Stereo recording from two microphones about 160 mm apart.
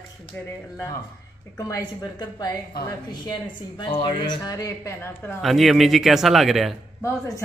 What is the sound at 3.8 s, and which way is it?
Speech, 30° left (ahead or behind).